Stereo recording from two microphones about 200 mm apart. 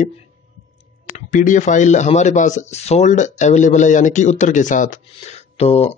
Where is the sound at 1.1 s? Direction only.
40° left (ahead or behind).